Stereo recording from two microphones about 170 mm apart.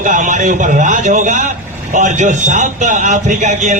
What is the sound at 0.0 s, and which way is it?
A man's voice, 50° right (ahead or behind).